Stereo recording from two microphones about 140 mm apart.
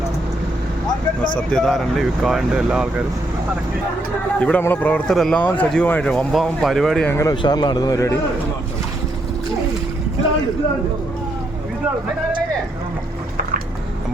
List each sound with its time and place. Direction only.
1.5 s speech: centre (ahead or behind)
4.4 s speech: 10° left (ahead or behind)
7.1 s a man's voice: 20° left (ahead or behind)
7.4 s a man's voice: 30° left (ahead or behind)